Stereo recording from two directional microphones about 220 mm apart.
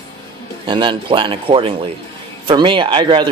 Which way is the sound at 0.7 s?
20° right (ahead or behind).